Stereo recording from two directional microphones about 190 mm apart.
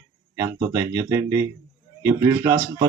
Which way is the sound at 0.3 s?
15° right (ahead or behind).